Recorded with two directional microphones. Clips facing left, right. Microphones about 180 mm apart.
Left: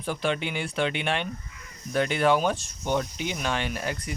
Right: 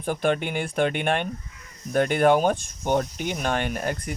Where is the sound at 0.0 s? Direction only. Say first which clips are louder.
Right 4 dB; 50° right (ahead or behind).